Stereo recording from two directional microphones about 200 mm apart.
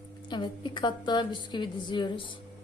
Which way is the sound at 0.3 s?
25° left (ahead or behind).